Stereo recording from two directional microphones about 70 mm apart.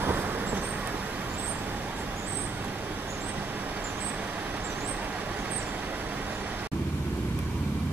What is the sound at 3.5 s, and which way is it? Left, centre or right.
Vehicle, right.